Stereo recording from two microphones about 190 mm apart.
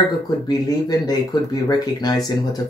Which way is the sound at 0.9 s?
20° left (ahead or behind).